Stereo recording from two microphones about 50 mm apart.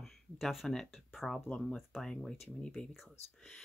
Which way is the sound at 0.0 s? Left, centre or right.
Centre.